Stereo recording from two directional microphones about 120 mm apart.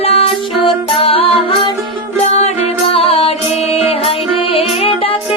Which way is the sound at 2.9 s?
55° left (ahead or behind).